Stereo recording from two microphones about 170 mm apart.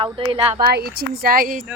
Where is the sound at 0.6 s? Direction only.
65° right (ahead or behind).